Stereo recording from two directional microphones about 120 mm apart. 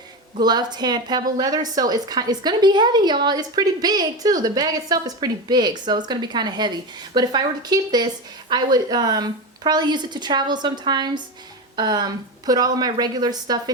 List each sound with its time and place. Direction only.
0.3 s a woman's voice: 35° right (ahead or behind)